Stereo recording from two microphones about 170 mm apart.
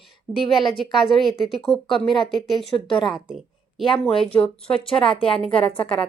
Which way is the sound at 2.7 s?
30° left (ahead or behind).